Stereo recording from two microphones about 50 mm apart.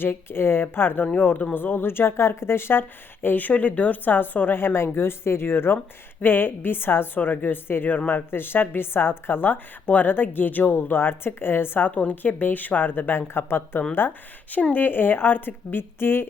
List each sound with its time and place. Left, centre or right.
0.0 s speech: left
7.9 s speech: left
8.3 s speech: left
11.9 s speech: left
14.5 s speech: left